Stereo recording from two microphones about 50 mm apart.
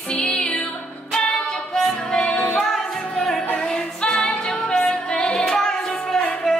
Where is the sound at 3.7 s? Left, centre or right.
Centre.